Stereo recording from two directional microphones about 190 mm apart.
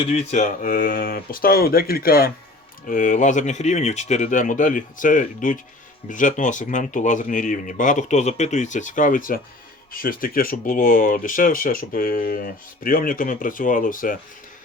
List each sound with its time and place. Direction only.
0.0 s speech: 35° left (ahead or behind)